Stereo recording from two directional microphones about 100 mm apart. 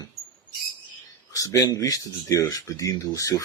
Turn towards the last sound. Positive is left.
turn(degrees=35)  # may be behind; listen again after turning